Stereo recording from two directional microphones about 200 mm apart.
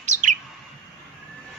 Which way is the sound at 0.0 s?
35° right (ahead or behind).